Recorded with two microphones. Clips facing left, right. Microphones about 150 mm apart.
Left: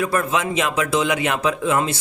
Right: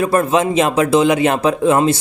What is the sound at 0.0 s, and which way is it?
Speech, 35° right (ahead or behind).